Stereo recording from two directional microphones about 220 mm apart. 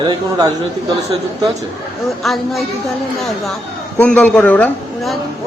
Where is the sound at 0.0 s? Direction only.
20° right (ahead or behind).